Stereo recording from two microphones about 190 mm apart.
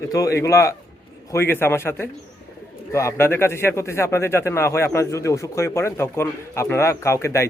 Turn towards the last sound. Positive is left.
turn(degrees=15)  # may be behind; listen again after turning